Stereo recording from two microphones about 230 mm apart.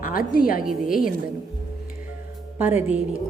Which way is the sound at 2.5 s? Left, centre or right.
Centre.